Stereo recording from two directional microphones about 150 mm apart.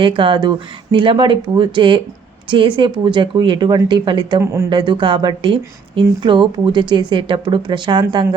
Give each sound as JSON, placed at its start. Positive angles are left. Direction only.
{"t": 0.0, "sound": "speech", "side_deg": -35}